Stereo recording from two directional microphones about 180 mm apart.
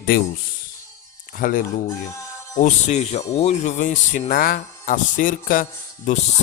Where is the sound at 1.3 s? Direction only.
50° left (ahead or behind).